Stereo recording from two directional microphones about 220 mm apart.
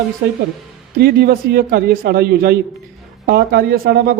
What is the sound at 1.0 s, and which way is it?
Speech, 45° right (ahead or behind).